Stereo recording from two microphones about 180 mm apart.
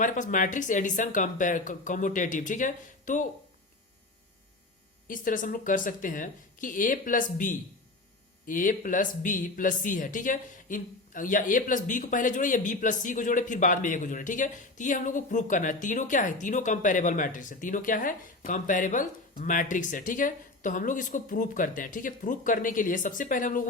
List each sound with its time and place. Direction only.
0.0 s speech: 45° left (ahead or behind)
5.0 s speech: 50° left (ahead or behind)